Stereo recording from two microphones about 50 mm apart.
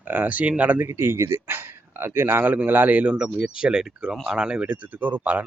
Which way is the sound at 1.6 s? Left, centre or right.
Right.